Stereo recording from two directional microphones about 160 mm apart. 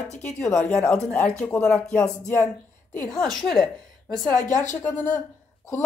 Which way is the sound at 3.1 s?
5° left (ahead or behind).